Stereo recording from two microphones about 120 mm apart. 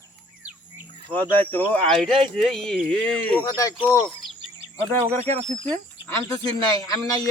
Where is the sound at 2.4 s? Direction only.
Centre (ahead or behind).